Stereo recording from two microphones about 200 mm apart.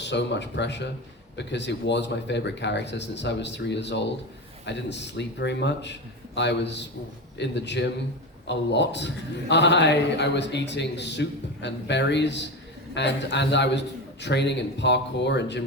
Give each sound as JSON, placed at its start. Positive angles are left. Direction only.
{"t": 0.0, "sound": "a man's voice", "side_deg": 60}